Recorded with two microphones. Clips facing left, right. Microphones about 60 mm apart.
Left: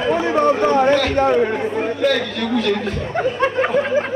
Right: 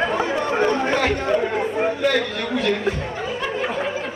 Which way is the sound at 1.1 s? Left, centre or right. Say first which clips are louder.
Left 6 dB; left.